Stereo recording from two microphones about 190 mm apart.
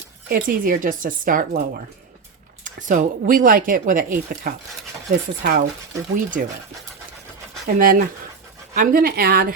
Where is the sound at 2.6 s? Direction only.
40° right (ahead or behind).